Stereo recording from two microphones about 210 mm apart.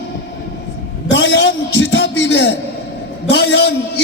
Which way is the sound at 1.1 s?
60° left (ahead or behind).